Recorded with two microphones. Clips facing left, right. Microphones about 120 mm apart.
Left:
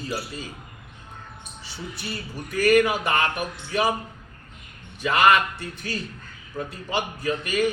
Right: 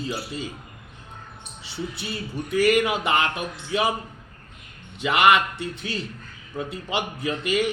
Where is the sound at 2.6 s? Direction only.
25° right (ahead or behind).